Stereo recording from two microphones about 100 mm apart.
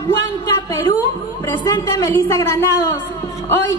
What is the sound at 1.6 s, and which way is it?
Speech, 35° left (ahead or behind).